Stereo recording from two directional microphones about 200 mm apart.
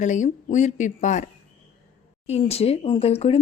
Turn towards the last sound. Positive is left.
turn(degrees=30)  # may be behind; listen again after turning